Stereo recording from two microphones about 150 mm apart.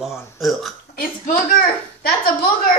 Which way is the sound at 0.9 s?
75° left (ahead or behind).